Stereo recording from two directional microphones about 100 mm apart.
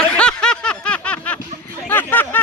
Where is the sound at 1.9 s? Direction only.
20° left (ahead or behind).